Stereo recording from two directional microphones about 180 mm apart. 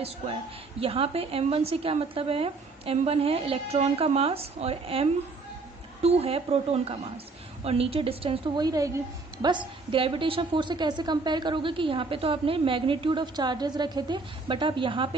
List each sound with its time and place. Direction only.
0.0 s a woman's voice: 30° right (ahead or behind)